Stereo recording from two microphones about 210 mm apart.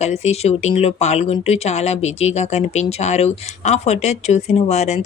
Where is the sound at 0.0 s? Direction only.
30° left (ahead or behind).